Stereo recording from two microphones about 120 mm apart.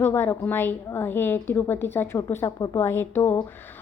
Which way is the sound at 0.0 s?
20° left (ahead or behind).